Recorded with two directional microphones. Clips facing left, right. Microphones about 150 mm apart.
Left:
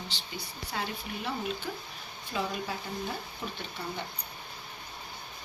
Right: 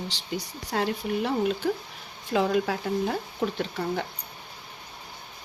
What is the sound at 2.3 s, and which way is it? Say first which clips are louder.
Speech: right 10 dB; 90° right.